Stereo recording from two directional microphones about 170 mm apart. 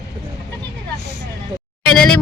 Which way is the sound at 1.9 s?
Centre (ahead or behind).